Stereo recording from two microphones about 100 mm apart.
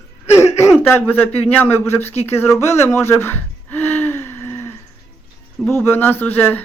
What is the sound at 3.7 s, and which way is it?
Gasp, 20° left (ahead or behind).